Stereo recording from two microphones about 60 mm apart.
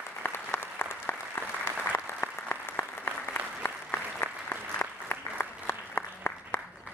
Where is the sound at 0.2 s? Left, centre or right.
Left.